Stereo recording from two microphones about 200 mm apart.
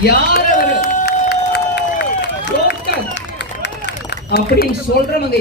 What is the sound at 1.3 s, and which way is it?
Crowd, 55° left (ahead or behind).